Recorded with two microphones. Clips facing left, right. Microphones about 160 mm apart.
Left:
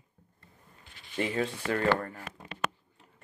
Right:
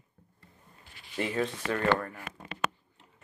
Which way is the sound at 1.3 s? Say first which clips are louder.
Even; 35° left (ahead or behind).